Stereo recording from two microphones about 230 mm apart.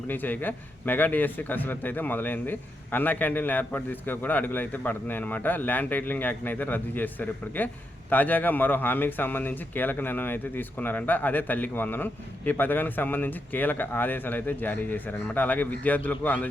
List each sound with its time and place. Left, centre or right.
0.1 s a man's voice: centre